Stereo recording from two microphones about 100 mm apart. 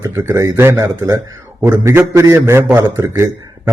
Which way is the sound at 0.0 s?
35° right (ahead or behind).